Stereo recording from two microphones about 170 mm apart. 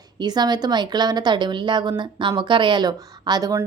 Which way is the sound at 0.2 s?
25° right (ahead or behind).